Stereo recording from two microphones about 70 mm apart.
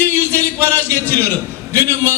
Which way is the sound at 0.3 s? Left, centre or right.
Left.